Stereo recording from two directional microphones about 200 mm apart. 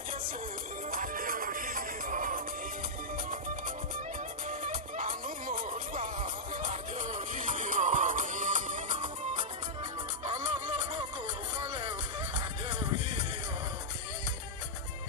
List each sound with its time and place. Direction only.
0.9 s music: 45° right (ahead or behind)